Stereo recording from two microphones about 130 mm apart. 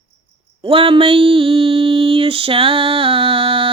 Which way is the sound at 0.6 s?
45° right (ahead or behind).